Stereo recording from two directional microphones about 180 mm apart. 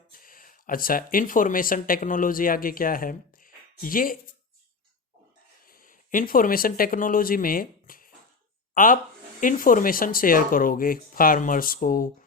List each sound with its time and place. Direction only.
0.1 s speech: 50° left (ahead or behind)
5.6 s speech: 50° left (ahead or behind)